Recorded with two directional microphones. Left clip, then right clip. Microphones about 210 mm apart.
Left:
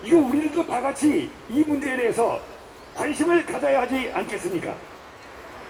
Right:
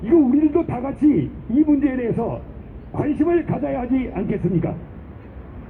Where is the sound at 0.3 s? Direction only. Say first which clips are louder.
Right 5 dB; 65° left (ahead or behind).